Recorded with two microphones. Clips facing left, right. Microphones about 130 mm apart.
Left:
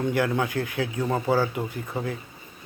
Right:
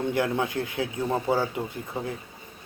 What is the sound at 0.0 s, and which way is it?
Speech, 25° right (ahead or behind).